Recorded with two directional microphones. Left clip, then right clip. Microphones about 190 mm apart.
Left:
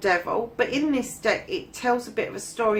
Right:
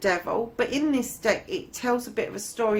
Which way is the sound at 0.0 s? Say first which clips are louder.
Left 2 dB; 30° right (ahead or behind).